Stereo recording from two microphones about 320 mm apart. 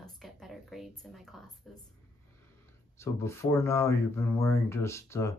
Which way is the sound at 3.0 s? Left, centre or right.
Centre.